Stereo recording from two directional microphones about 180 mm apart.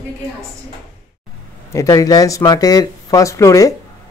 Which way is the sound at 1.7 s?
20° left (ahead or behind).